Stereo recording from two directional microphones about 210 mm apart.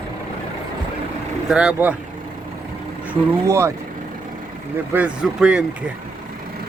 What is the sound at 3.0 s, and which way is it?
Speech, 10° right (ahead or behind).